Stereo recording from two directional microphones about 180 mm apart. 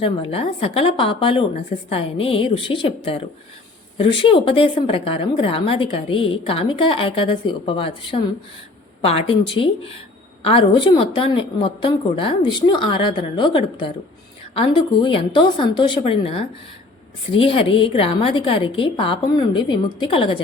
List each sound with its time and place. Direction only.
0.0 s a woman's voice: 30° left (ahead or behind)